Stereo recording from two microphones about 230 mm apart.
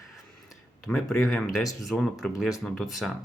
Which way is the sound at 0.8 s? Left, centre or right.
Centre.